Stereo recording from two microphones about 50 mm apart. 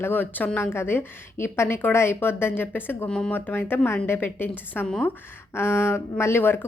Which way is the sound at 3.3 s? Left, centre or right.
Left.